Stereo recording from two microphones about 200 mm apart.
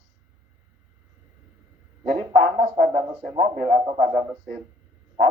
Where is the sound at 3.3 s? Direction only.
20° right (ahead or behind).